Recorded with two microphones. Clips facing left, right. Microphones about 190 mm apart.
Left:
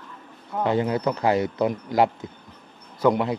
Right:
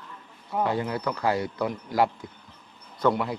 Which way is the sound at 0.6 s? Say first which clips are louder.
Left 4 dB; 25° left (ahead or behind).